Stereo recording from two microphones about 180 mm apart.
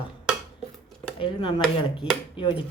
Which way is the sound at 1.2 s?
30° left (ahead or behind).